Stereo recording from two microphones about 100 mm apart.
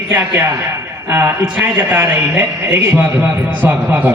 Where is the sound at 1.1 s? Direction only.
20° right (ahead or behind).